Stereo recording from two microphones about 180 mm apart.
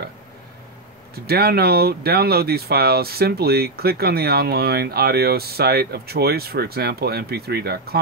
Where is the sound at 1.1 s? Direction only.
60° right (ahead or behind).